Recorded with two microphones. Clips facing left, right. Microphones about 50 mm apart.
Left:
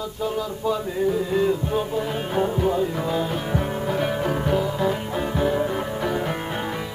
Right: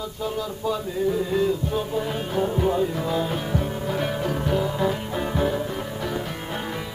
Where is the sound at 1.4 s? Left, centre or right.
Left.